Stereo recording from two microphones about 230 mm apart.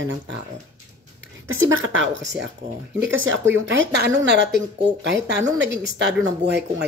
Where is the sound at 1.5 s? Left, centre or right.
Right.